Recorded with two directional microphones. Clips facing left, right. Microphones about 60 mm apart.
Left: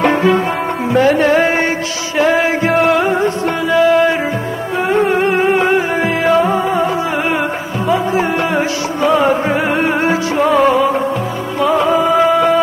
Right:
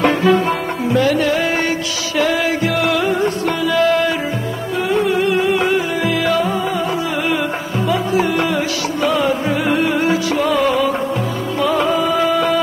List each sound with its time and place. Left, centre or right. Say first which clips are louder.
0.9 s music: left 5 dB; left
4.8 s music: left 3 dB; left
7.9 s music: left 2 dB; left
11.9 s music: left 4 dB; left